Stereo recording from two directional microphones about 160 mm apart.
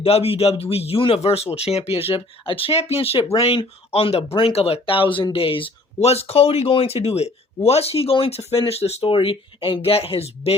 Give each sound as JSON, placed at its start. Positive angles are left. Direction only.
{"t": 0.0, "sound": "speech", "side_deg": 40}